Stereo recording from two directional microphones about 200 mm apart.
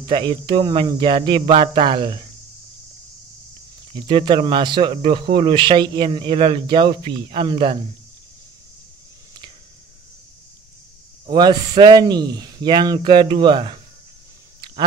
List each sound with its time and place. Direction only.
0.1 s speech: 25° right (ahead or behind)
3.9 s speech: 25° right (ahead or behind)
11.2 s speech: 20° right (ahead or behind)